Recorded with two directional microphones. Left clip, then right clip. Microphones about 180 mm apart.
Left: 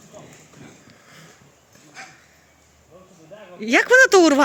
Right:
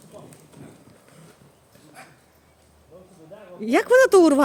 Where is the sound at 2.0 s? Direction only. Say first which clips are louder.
Left 6 dB; 75° right (ahead or behind).